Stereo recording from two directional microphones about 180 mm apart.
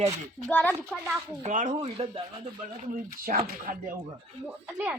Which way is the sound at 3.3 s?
55° right (ahead or behind).